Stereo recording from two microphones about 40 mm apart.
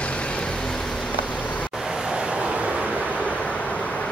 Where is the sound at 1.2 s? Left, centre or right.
Left.